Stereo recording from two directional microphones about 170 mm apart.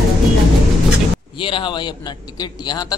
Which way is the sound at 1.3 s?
30° left (ahead or behind).